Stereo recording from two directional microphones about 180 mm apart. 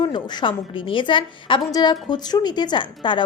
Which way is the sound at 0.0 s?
25° left (ahead or behind).